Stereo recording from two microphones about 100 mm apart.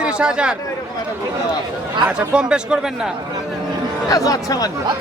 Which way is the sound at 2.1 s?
10° right (ahead or behind).